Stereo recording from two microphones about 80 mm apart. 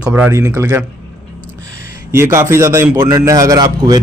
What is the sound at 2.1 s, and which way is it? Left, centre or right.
A man's voice, right.